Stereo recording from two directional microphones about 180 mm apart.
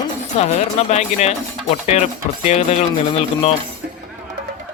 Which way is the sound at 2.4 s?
35° left (ahead or behind).